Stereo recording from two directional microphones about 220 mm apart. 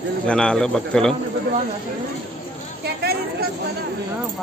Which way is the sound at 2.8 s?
45° right (ahead or behind).